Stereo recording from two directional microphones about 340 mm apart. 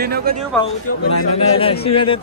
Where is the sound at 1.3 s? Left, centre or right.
Centre.